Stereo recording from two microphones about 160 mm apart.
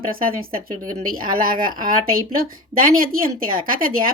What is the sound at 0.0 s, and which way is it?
Speech, 65° right (ahead or behind).